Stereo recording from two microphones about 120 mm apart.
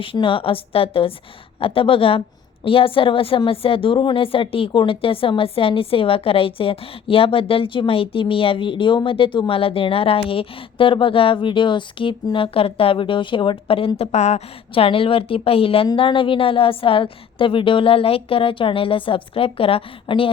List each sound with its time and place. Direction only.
0.0 s a woman's voice: 45° left (ahead or behind)